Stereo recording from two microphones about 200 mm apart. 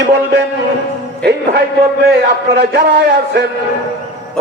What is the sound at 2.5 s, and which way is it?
Speech, 55° right (ahead or behind).